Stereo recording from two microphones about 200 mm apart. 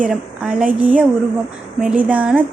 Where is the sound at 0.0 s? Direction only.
5° right (ahead or behind).